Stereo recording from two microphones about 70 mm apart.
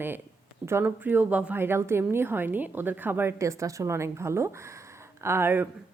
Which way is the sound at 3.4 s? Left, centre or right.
Right.